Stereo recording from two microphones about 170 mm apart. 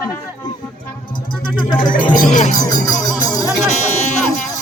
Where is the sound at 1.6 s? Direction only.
25° left (ahead or behind).